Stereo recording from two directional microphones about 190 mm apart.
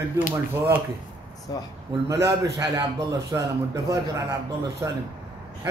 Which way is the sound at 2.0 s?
15° right (ahead or behind).